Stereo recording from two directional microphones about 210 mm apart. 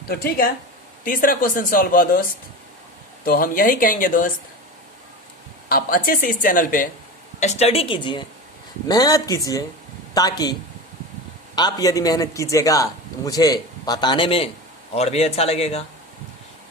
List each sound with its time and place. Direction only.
0.1 s speech: 45° left (ahead or behind)
3.2 s speech: 45° left (ahead or behind)
5.6 s a woman's voice: 45° left (ahead or behind); by 10.5 s 20° left (ahead or behind)
11.5 s a man's voice: 20° left (ahead or behind)